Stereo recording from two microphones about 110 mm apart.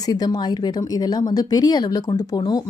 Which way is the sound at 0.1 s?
35° left (ahead or behind).